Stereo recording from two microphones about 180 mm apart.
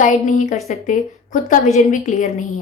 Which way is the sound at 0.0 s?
45° left (ahead or behind).